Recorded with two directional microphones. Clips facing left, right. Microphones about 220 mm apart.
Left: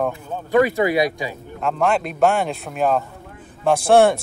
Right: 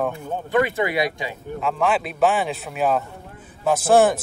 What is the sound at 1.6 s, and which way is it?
Speech, centre (ahead or behind).